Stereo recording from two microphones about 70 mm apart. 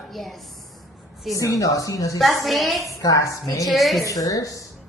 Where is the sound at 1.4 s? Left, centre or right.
Left.